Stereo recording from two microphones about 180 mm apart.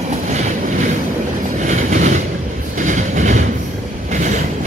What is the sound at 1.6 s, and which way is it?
Train, 45° right (ahead or behind).